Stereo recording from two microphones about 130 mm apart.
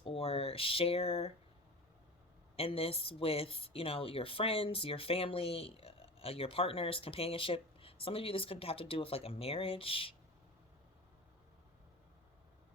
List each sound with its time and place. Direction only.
0.0 s speech: 45° left (ahead or behind)
2.6 s speech: 50° left (ahead or behind)